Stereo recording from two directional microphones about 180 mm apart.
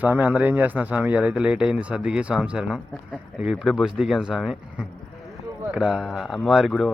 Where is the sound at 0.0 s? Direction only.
10° right (ahead or behind).